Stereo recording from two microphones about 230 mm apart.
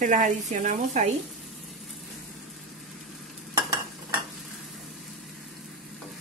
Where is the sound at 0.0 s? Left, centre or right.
Right.